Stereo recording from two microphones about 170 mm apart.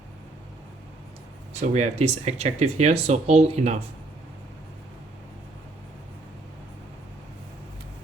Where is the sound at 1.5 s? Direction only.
45° right (ahead or behind).